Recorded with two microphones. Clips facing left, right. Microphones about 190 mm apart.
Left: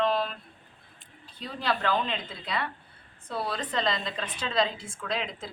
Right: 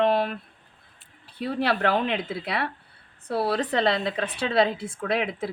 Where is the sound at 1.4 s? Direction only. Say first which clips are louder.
Right 6 dB; 65° right (ahead or behind).